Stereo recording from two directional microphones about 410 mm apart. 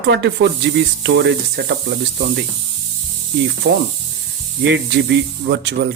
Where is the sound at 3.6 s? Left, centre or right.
Right.